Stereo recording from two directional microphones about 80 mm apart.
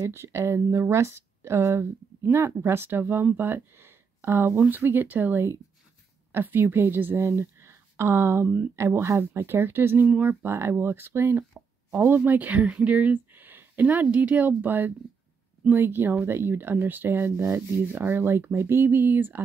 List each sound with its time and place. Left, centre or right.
0.0 s a woman's voice: right